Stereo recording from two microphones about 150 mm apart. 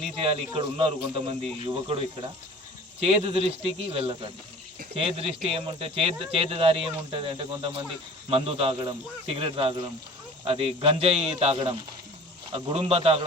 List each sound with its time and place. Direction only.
0.0 s a man's voice: 40° right (ahead or behind)